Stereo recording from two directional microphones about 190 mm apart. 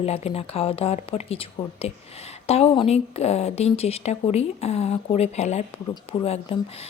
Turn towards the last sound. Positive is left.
turn(degrees=30)  # may be behind; listen again after turning